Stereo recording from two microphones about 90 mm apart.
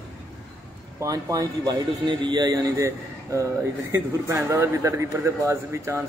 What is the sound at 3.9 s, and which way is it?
A man's voice, 35° right (ahead or behind).